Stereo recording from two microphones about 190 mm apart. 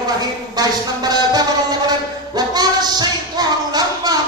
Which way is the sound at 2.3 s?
20° right (ahead or behind).